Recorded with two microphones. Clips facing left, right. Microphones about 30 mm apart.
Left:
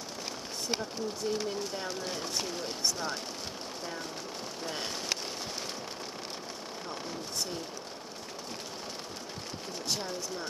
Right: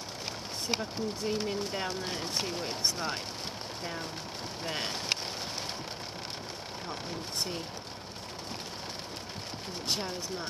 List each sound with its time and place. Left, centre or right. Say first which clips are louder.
0.7 s speech: right 1 dB; right
4.6 s speech: right 2 dB; right
9.8 s speech: right 1 dB; right